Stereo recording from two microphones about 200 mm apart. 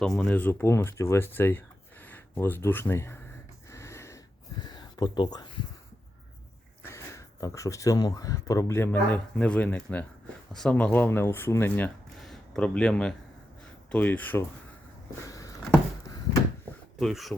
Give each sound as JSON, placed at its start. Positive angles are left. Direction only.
{"t": 0.0, "sound": "speech", "side_deg": 5}
{"t": 3.7, "sound": "snort", "side_deg": 15}
{"t": 4.6, "sound": "speech", "side_deg": 20}
{"t": 6.8, "sound": "speech", "side_deg": 15}
{"t": 12.2, "sound": "a sound", "side_deg": 5}
{"t": 13.9, "sound": "speech", "side_deg": 10}
{"t": 15.2, "sound": "a sound", "side_deg": 15}
{"t": 17.0, "sound": "speech", "side_deg": 0}